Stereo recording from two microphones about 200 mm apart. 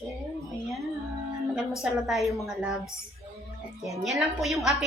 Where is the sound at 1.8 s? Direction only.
Centre (ahead or behind).